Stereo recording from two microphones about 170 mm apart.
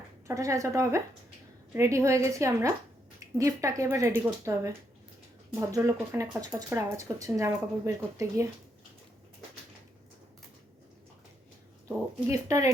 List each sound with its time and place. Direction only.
0.3 s speech: 20° right (ahead or behind)
12.3 s speech: 20° right (ahead or behind)